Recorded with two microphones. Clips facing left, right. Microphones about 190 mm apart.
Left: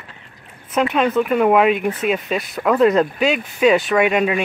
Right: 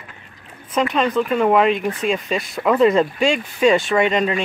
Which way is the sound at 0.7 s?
5° left (ahead or behind).